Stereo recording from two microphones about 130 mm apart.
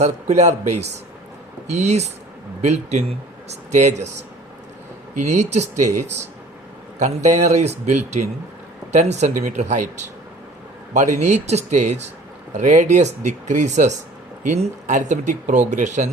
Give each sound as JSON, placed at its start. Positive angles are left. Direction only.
{"t": 0.0, "sound": "speech", "side_deg": -60}
{"t": 5.1, "sound": "speech", "side_deg": -65}
{"t": 7.0, "sound": "speech", "side_deg": -65}